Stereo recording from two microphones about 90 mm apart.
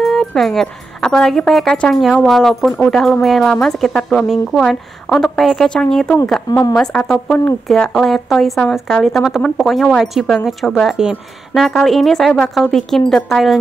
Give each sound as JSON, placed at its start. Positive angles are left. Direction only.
{"t": 0.0, "sound": "speech", "side_deg": 5}